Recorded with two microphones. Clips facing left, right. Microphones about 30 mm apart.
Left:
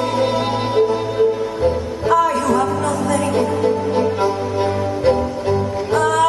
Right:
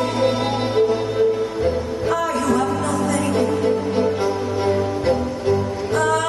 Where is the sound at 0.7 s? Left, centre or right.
Centre.